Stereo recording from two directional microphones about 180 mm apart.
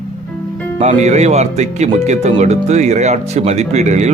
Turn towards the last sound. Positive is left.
turn(degrees=-40)  # may be behind; listen again after turning